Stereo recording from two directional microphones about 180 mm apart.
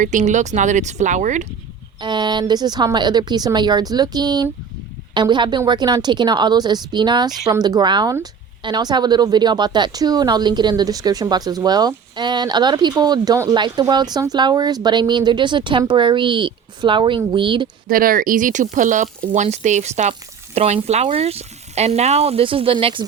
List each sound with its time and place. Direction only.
0.0 s speech: 45° right (ahead or behind)
2.0 s a woman's voice: 25° right (ahead or behind)
17.8 s speech: 50° right (ahead or behind); by 23.0 s 30° right (ahead or behind)